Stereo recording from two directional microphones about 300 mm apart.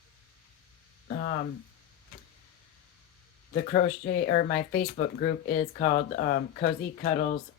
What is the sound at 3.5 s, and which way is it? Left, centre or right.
Speech, left.